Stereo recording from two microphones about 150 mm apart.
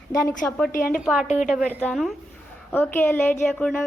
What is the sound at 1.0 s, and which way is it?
Speech, centre (ahead or behind).